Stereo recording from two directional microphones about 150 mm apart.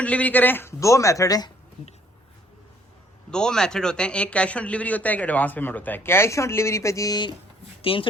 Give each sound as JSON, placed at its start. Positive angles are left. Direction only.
{"t": 0.0, "sound": "a man's voice", "side_deg": 10}
{"t": 3.2, "sound": "a man's voice", "side_deg": 5}